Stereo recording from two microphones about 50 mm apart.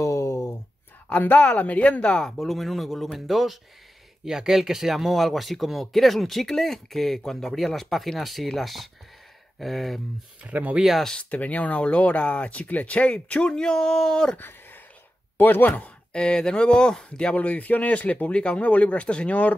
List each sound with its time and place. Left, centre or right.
0.0 s a sound: left
1.2 s speech: left
2.3 s speech: centre
10.5 s speech: right
11.0 s speech: centre
11.2 s speech: left; by 14.3 s centre
15.3 s speech: left
16.2 s speech: centre